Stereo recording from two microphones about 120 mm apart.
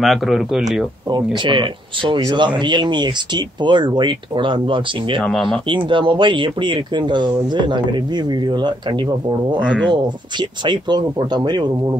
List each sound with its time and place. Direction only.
0.0 s speech: centre (ahead or behind)
1.1 s speech: 40° right (ahead or behind)
5.2 s speech: centre (ahead or behind)
5.7 s speech: 40° right (ahead or behind)
10.6 s speech: 40° right (ahead or behind)